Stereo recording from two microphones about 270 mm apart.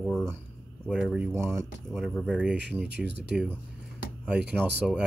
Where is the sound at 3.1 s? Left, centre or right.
Right.